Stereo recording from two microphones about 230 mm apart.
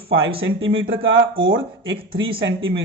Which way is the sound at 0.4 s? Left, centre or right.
Right.